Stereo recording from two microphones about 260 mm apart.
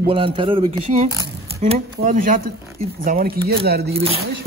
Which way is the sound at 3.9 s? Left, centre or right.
Right.